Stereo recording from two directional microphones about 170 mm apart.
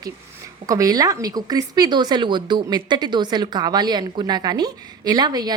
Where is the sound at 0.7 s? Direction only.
20° right (ahead or behind).